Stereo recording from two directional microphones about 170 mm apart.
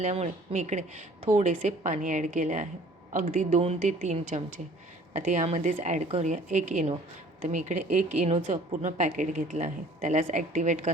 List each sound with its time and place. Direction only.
0.0 s a woman's voice: 45° right (ahead or behind)